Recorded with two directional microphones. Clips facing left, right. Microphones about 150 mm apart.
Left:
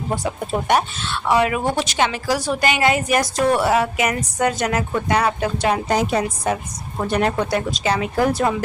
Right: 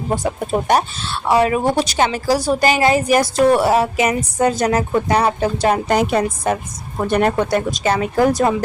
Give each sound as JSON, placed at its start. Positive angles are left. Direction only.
{"t": 0.7, "sound": "a woman's voice", "side_deg": -35}
{"t": 5.7, "sound": "a woman's voice", "side_deg": -60}